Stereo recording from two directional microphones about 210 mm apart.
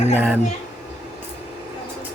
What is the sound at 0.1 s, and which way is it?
Speech, 10° right (ahead or behind).